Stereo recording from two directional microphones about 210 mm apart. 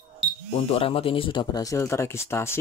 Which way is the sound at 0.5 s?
25° left (ahead or behind).